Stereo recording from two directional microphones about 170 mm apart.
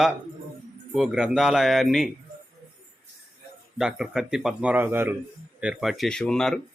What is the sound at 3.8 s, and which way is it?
Speech, 5° right (ahead or behind).